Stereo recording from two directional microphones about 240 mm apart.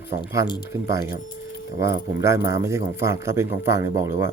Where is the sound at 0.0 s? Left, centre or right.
Centre.